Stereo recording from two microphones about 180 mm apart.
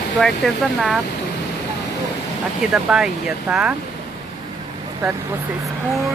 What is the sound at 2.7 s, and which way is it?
Speech, 5° right (ahead or behind).